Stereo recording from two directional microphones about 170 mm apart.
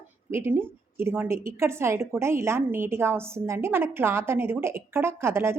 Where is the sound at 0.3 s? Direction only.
15° right (ahead or behind).